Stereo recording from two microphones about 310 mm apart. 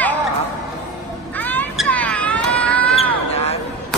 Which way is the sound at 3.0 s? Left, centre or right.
Centre.